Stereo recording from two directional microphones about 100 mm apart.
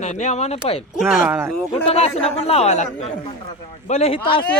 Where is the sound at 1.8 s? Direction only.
90° left.